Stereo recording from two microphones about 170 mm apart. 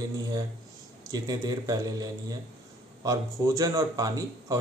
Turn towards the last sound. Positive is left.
turn(degrees=-20)  # may be behind; listen again after turning